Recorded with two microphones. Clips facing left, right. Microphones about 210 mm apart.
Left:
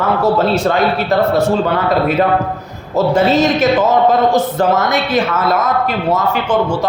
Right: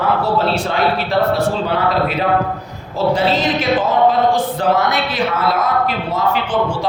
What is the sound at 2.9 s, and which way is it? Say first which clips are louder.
A man's voice: left 4 dB; 45° left (ahead or behind).